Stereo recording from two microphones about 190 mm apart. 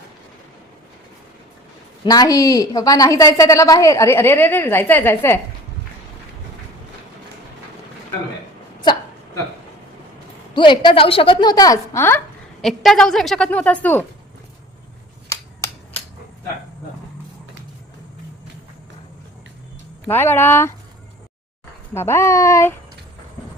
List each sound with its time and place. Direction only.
2.0 s a woman's voice: 20° left (ahead or behind)
8.8 s a sound: 25° left (ahead or behind)
10.5 s a woman's voice: 25° left (ahead or behind)
12.6 s a woman's voice: centre (ahead or behind)
15.3 s a sound: 15° left (ahead or behind)
20.1 s a woman's voice: 10° left (ahead or behind)
21.9 s a woman's voice: 15° left (ahead or behind)